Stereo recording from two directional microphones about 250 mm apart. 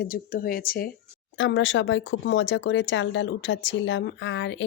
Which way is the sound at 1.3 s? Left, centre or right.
Left.